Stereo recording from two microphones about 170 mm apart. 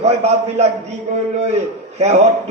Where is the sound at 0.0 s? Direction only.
40° right (ahead or behind).